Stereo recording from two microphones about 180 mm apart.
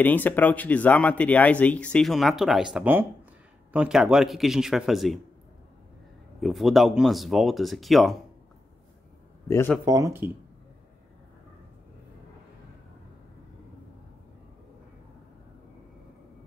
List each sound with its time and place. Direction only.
0.0 s speech: 10° left (ahead or behind)
6.4 s speech: centre (ahead or behind)
9.5 s speech: 15° left (ahead or behind)
9.8 s speech: 20° right (ahead or behind)